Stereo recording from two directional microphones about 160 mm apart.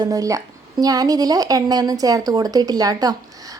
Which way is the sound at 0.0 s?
20° right (ahead or behind).